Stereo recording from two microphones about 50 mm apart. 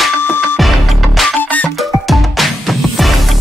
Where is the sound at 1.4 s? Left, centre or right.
Left.